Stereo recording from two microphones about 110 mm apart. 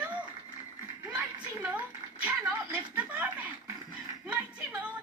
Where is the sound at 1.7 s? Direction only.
15° right (ahead or behind).